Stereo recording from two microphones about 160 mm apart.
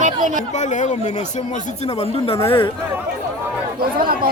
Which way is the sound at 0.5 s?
50° left (ahead or behind).